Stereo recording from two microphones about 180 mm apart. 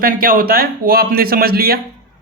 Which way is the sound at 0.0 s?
55° right (ahead or behind).